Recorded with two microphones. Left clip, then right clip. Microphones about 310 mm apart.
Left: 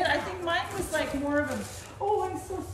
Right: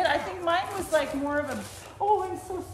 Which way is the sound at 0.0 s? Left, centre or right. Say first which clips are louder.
Right 2 dB; centre.